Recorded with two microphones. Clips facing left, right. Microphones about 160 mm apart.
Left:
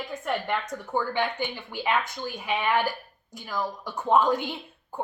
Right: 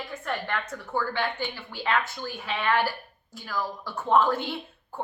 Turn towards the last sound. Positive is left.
turn(degrees=15)  # may be behind; listen again after turning